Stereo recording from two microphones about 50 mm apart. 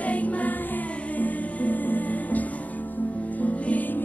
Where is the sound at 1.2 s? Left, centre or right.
Left.